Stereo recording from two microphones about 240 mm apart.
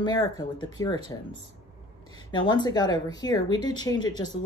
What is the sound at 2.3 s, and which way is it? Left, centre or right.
Speech, centre.